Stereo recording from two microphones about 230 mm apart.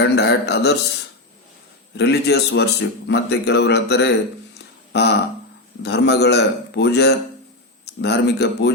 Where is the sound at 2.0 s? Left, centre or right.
Left.